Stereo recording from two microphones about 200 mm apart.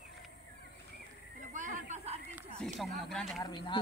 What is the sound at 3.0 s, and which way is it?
Speech, centre (ahead or behind).